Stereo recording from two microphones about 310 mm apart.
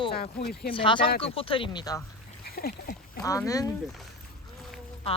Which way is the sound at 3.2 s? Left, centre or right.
Centre.